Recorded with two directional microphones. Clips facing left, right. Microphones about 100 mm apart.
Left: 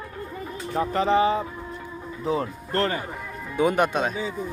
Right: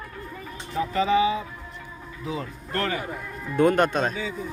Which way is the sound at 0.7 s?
35° left (ahead or behind).